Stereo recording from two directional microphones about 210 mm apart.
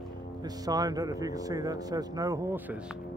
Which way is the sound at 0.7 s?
15° right (ahead or behind).